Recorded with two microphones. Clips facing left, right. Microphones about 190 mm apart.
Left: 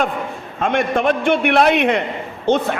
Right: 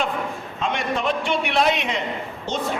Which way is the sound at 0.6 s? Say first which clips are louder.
Left 7 dB; 55° left (ahead or behind).